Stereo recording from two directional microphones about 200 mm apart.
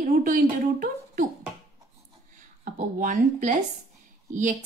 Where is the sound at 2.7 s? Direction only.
40° right (ahead or behind).